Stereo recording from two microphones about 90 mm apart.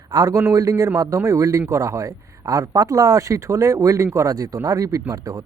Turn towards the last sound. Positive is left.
turn(degrees=-40)  # may be behind; listen again after turning